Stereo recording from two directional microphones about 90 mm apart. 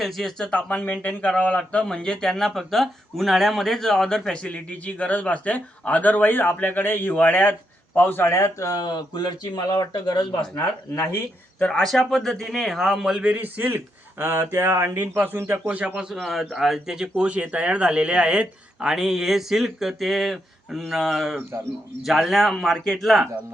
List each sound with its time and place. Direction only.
0.0 s a man's voice: 5° left (ahead or behind); by 8.3 s 20° left (ahead or behind)
8.3 s speech: 35° left (ahead or behind); by 10.6 s 50° left (ahead or behind)
10.6 s speech: 30° left (ahead or behind)
11.6 s a man's voice: 5° left (ahead or behind)
13.2 s a man's voice: 20° right (ahead or behind)
16.1 s a man's voice: centre (ahead or behind)